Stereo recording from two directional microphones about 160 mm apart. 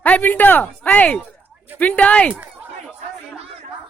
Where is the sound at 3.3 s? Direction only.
40° right (ahead or behind).